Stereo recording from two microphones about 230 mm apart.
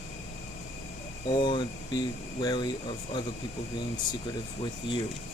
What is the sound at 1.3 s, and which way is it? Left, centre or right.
Speech, centre.